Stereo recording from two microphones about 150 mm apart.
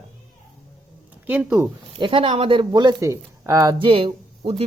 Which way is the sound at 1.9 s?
35° right (ahead or behind).